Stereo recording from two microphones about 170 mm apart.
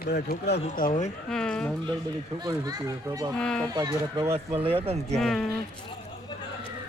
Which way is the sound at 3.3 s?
5° left (ahead or behind).